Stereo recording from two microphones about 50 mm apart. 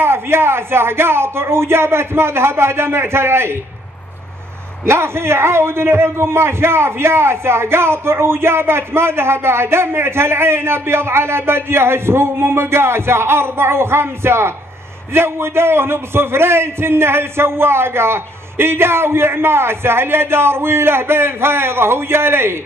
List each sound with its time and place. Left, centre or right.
0.0 s a man's voice: right
4.8 s a man's voice: right